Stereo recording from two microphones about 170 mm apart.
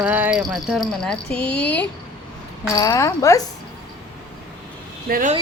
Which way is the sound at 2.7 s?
20° left (ahead or behind).